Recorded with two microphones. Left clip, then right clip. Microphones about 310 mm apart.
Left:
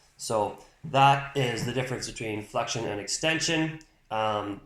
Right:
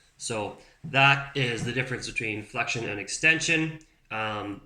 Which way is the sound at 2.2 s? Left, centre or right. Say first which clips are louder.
Left 2 dB; centre.